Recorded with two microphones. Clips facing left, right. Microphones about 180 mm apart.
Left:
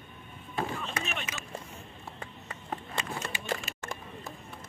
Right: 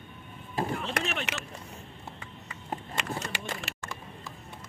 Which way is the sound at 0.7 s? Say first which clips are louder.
Right 4 dB; 75° right (ahead or behind).